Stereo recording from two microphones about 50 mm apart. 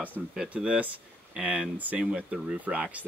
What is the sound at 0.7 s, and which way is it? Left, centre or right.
Speech, right.